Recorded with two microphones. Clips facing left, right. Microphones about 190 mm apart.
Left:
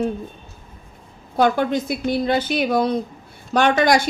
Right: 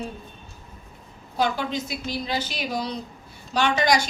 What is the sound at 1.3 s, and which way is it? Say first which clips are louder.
Speech: left 7 dB; 55° left (ahead or behind).